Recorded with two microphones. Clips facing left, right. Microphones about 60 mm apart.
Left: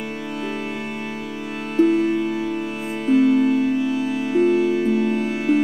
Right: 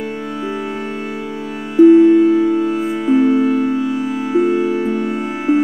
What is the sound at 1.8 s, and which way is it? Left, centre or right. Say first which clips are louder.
Music: right 9 dB; centre.